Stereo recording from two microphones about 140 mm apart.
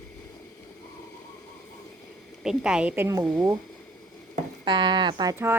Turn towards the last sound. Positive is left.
turn(degrees=-15)  # may be behind; listen again after turning